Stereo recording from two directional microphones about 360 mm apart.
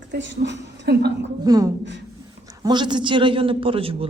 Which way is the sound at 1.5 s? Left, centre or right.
Centre.